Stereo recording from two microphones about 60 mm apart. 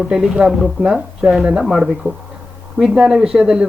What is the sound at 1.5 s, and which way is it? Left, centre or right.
Speech, centre.